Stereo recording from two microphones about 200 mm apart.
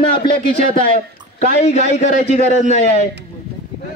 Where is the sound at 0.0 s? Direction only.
30° left (ahead or behind).